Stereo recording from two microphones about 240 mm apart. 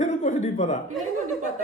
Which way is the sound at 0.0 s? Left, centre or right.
Left.